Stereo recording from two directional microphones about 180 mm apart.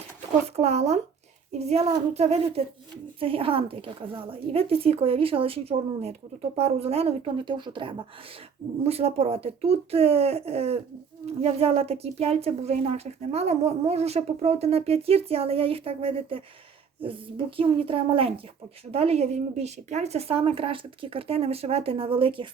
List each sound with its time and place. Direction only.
0.5 s a woman's voice: 35° right (ahead or behind)